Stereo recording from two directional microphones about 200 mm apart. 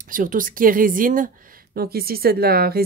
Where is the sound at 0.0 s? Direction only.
40° right (ahead or behind).